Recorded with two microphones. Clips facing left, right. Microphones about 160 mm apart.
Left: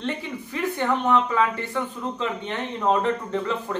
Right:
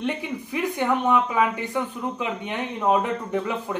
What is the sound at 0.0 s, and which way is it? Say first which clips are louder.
Speech: right 2 dB; 15° right (ahead or behind).